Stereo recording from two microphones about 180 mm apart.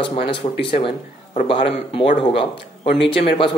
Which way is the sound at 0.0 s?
30° left (ahead or behind).